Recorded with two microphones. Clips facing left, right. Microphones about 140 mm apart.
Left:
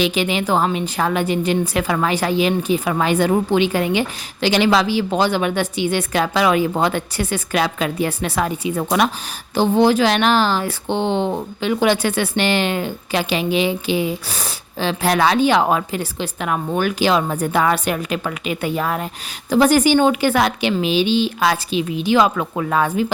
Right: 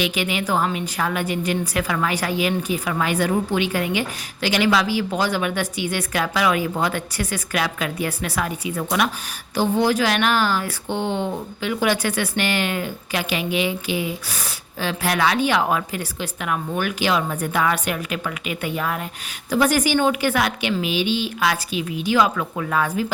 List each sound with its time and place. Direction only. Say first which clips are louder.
0.0 s speech: left 4 dB; 30° left (ahead or behind)